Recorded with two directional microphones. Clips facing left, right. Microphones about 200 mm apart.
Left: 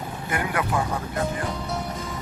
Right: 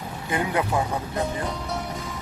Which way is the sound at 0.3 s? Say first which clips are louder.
Right 2 dB; 20° right (ahead or behind).